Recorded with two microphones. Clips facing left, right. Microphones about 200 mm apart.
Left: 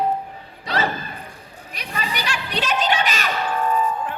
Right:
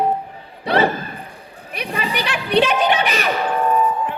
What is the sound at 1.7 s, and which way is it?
Music, 60° right (ahead or behind).